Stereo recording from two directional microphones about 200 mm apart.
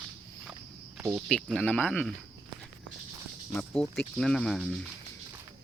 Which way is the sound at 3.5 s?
5° left (ahead or behind).